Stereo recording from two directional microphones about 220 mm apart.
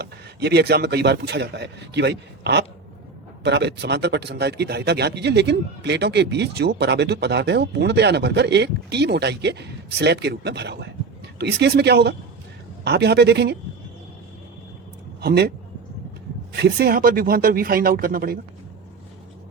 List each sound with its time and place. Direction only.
0.0 s a man's voice: 45° right (ahead or behind)
15.2 s a man's voice: 45° right (ahead or behind)
16.6 s a man's voice: 45° right (ahead or behind)